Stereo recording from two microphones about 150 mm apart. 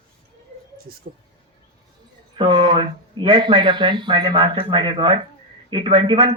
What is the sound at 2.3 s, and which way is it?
Speech, 35° right (ahead or behind).